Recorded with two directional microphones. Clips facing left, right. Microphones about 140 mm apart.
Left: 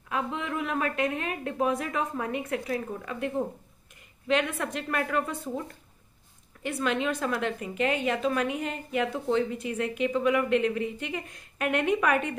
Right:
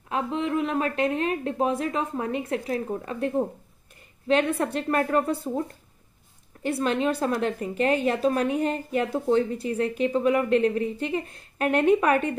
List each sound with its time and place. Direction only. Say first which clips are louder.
0.1 s a woman's voice: right 5 dB; 30° right (ahead or behind)
6.6 s a woman's voice: right 4 dB; 35° right (ahead or behind)